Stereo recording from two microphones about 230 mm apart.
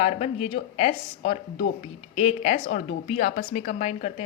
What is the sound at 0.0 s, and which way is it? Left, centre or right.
A woman's voice, left.